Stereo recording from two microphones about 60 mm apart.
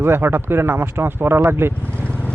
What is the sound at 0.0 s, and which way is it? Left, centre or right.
Speech, right.